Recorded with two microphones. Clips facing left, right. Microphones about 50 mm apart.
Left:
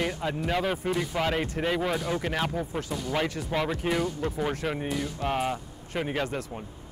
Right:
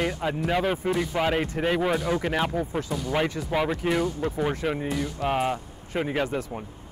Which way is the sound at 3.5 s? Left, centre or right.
Centre.